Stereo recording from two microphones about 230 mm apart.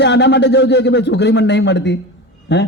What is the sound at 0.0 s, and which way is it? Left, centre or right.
A man's voice, left.